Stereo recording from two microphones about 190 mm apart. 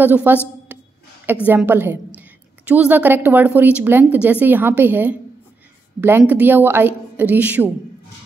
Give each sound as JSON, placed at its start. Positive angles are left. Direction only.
{"t": 0.0, "sound": "a woman's voice", "side_deg": -10}
{"t": 0.7, "sound": "a sound", "side_deg": -10}
{"t": 1.2, "sound": "a woman's voice", "side_deg": -10}